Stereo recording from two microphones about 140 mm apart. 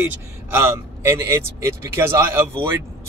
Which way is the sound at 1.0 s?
20° right (ahead or behind).